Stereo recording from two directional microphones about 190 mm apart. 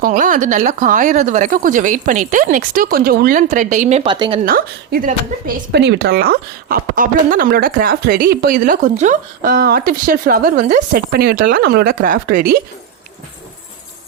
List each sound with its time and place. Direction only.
0.0 s speech: 45° right (ahead or behind); by 4.4 s 25° right (ahead or behind)
4.4 s speech: 50° right (ahead or behind)
5.7 s speech: 60° right (ahead or behind)